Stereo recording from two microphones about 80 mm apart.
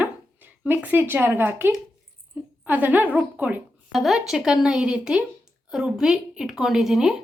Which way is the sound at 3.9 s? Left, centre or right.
Centre.